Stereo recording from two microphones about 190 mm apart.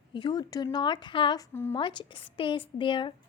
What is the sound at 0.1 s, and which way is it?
Speech, 25° left (ahead or behind).